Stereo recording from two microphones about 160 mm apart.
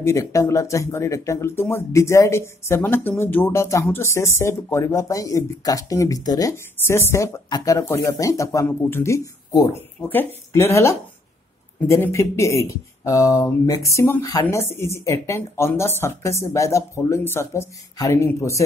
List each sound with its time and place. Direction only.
0.0 s speech: 20° left (ahead or behind)